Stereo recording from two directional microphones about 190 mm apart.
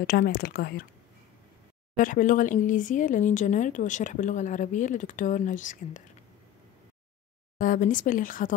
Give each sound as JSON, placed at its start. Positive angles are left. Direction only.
{"t": 0.0, "sound": "speech", "side_deg": 45}
{"t": 2.0, "sound": "speech", "side_deg": 45}
{"t": 7.5, "sound": "speech", "side_deg": 45}